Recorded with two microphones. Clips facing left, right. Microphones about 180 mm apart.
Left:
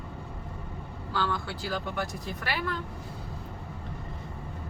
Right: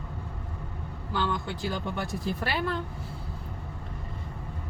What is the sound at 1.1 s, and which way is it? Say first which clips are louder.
Speech: right 1 dB; 20° right (ahead or behind).